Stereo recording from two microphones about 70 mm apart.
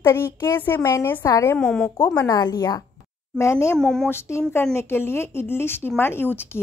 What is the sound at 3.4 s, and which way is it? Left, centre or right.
Speech, left.